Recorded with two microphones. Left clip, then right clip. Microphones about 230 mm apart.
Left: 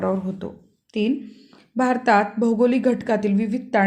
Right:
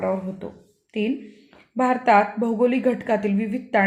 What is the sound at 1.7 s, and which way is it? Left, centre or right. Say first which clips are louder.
A woman's voice: right 1 dB; centre.